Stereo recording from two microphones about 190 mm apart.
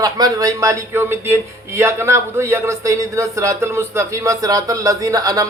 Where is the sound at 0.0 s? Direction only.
20° right (ahead or behind).